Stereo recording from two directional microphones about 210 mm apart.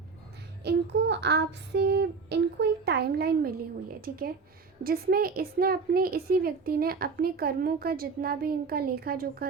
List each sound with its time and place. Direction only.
0.6 s a woman's voice: 55° right (ahead or behind)